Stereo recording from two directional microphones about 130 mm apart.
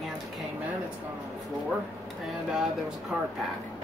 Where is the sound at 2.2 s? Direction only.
Centre (ahead or behind).